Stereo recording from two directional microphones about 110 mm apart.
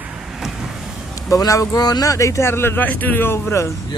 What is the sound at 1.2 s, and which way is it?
A man's voice, 30° left (ahead or behind).